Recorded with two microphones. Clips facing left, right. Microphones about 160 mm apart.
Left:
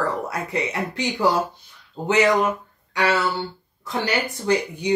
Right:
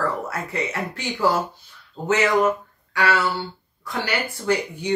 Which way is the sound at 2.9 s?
15° left (ahead or behind).